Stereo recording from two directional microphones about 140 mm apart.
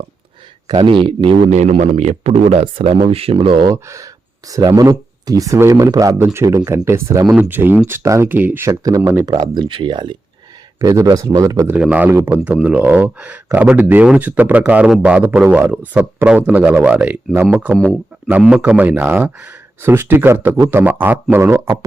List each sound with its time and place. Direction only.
0.7 s speech: 35° right (ahead or behind)
1.8 s speech: 50° right (ahead or behind)
3.7 s a man's voice: 20° right (ahead or behind)
10.8 s speech: 25° right (ahead or behind)
11.8 s a man's voice: 10° right (ahead or behind)